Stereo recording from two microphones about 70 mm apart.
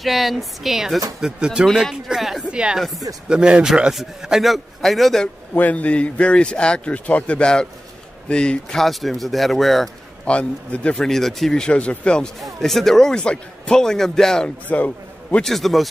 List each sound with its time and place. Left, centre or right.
0.0 s a man's voice: centre
2.0 s a sound: centre
2.5 s a man's voice: centre
5.5 s a man's voice: left
8.7 s a man's voice: centre
10.2 s a man's voice: centre
11.0 s a man's voice: centre
12.5 s a man's voice: centre
14.7 s a man's voice: left
15.4 s a man's voice: centre